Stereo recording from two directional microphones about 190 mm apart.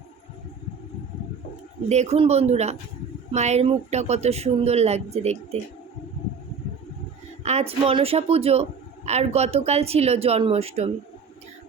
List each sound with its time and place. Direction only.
1.9 s speech: 35° right (ahead or behind)
7.4 s speech: 35° right (ahead or behind)